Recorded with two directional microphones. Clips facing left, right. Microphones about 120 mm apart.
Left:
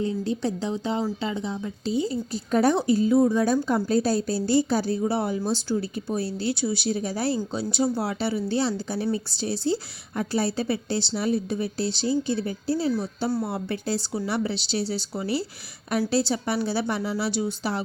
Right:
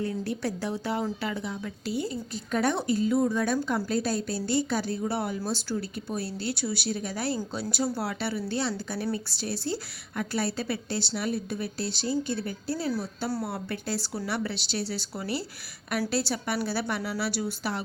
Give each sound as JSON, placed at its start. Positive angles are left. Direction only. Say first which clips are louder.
{"t": 0.0, "sound": "a woman's voice", "louder": "left 4 dB", "side_deg": 20}
{"t": 2.3, "sound": "a woman's voice", "louder": "left 6 dB", "side_deg": 35}